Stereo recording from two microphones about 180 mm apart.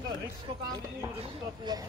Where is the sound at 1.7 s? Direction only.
25° right (ahead or behind).